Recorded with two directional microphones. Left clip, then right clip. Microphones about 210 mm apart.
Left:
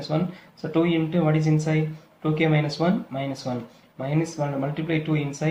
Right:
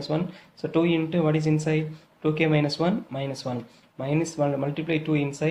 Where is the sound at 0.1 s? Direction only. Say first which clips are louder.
Left 2 dB; 45° right (ahead or behind).